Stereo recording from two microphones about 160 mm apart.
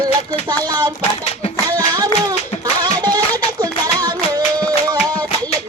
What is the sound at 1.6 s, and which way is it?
Clapping, 25° right (ahead or behind).